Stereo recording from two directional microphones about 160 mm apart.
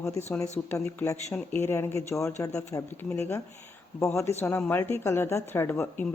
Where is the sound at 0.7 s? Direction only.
10° left (ahead or behind).